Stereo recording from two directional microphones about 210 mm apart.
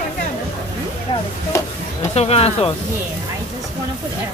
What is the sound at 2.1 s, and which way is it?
Speech, 30° left (ahead or behind).